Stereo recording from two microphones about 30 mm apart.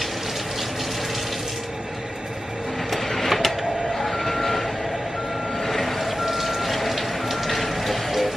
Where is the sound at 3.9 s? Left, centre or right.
Centre.